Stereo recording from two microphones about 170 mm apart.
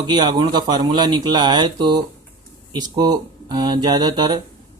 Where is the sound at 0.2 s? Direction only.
25° right (ahead or behind).